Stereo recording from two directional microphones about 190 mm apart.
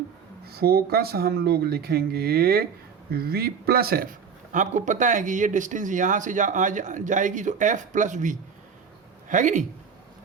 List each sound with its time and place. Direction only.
0.4 s a man's voice: 55° right (ahead or behind)
4.5 s speech: 40° right (ahead or behind)